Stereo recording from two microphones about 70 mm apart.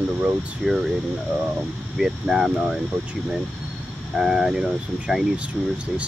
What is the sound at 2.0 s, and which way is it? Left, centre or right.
Speech, centre.